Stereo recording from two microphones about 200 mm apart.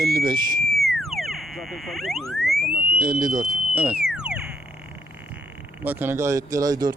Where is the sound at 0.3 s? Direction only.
20° right (ahead or behind).